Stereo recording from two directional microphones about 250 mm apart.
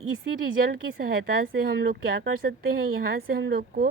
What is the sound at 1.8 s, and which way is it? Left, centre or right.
Speech, right.